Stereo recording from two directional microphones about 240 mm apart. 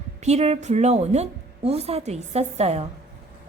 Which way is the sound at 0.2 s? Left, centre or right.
Right.